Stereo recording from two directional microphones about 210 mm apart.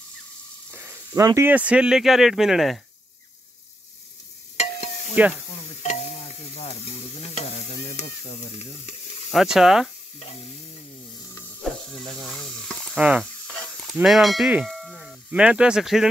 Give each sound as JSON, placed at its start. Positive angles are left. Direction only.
{"t": 0.7, "sound": "speech", "side_deg": -10}
{"t": 4.6, "sound": "a sound", "side_deg": 30}
{"t": 5.8, "sound": "stir", "side_deg": 30}
{"t": 9.3, "sound": "speech", "side_deg": 0}
{"t": 10.1, "sound": "stir", "side_deg": 30}
{"t": 11.9, "sound": "stir", "side_deg": 0}
{"t": 13.9, "sound": "speech", "side_deg": 0}